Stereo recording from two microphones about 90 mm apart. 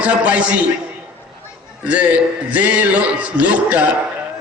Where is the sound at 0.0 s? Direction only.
15° right (ahead or behind).